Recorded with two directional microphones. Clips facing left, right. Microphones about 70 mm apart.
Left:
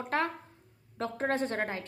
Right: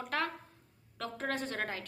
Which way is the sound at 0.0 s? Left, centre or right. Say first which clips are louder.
Left 4 dB; left.